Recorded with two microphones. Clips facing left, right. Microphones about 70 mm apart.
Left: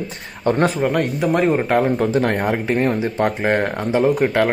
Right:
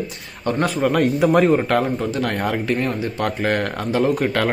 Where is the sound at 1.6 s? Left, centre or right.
Centre.